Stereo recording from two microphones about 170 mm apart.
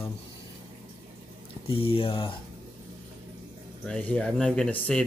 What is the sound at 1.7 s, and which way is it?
Speech, 35° left (ahead or behind).